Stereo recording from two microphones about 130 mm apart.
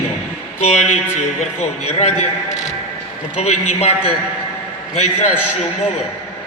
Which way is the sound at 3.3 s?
55° left (ahead or behind).